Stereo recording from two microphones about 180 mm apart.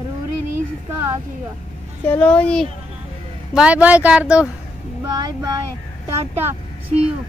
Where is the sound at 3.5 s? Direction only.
5° right (ahead or behind).